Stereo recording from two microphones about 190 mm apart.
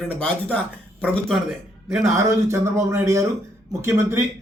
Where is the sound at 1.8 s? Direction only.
15° right (ahead or behind).